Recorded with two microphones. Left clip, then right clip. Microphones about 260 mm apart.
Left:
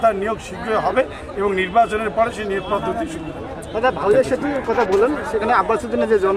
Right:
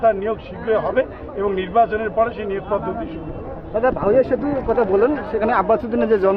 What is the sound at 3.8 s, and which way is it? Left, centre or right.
Speech, right.